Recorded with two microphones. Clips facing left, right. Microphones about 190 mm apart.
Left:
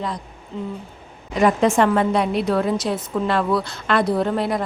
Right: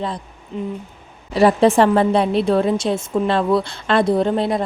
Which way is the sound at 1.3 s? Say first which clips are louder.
Right 4 dB; 30° right (ahead or behind).